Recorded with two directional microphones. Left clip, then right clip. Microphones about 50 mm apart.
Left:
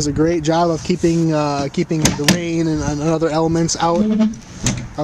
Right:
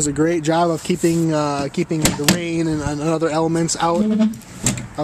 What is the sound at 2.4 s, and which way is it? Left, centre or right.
Speech, left.